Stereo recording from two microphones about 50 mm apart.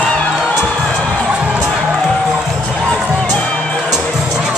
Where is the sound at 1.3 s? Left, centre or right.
Centre.